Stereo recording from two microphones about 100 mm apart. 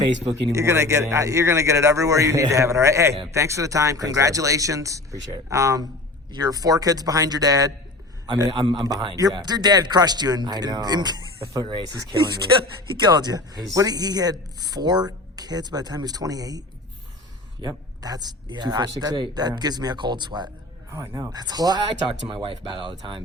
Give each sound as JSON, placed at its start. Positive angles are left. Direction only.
{"t": 0.3, "sound": "speech", "side_deg": -30}
{"t": 8.7, "sound": "speech", "side_deg": -40}
{"t": 12.1, "sound": "speech", "side_deg": -50}
{"t": 20.9, "sound": "speech", "side_deg": -30}
{"t": 21.2, "sound": "speech", "side_deg": -45}
{"t": 22.3, "sound": "speech", "side_deg": -55}